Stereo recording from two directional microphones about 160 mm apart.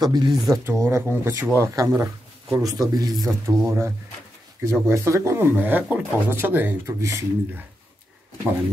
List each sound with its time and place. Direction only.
0.0 s speech: 25° right (ahead or behind)